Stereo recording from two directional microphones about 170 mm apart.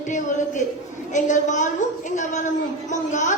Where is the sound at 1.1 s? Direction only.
45° left (ahead or behind).